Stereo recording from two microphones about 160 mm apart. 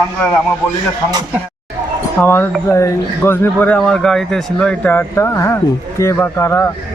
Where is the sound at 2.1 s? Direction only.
15° left (ahead or behind).